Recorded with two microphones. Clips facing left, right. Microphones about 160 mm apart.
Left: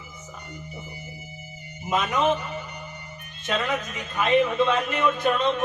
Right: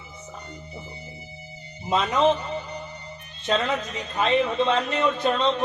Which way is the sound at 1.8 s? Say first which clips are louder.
Right 2 dB; 30° right (ahead or behind).